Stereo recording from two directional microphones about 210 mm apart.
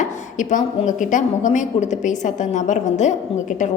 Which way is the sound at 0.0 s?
35° left (ahead or behind).